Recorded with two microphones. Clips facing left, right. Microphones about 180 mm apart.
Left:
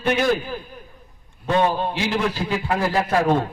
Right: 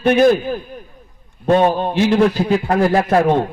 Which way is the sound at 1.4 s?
50° right (ahead or behind).